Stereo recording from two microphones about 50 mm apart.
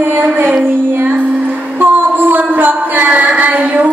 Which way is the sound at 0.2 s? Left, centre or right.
Right.